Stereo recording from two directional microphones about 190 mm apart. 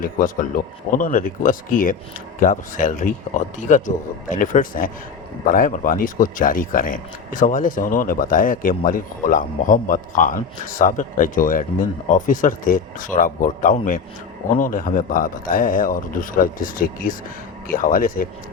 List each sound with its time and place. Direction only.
0.0 s speech: 45° left (ahead or behind)